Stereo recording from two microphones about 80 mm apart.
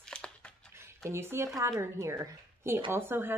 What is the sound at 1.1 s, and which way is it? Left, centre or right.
A woman's voice, right.